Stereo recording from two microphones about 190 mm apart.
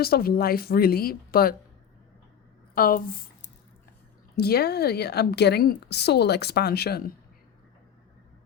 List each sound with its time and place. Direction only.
0.0 s speech: 55° left (ahead or behind)
2.7 s a woman's voice: 50° left (ahead or behind)